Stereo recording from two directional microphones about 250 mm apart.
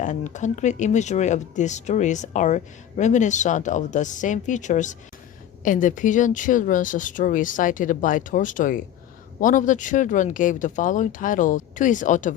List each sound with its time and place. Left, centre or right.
0.0 s speech: left